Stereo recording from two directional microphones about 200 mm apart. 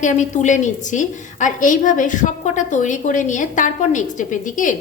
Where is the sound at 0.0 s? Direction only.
40° left (ahead or behind).